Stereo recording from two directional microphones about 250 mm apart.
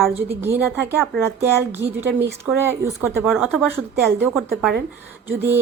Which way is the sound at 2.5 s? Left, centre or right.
Centre.